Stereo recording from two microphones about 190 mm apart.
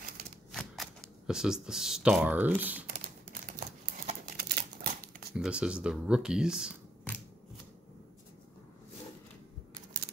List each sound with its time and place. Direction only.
0.5 s speech: centre (ahead or behind)
3.5 s crumpling: 35° right (ahead or behind)
4.4 s crumpling: 50° right (ahead or behind)
5.3 s speech: 5° right (ahead or behind)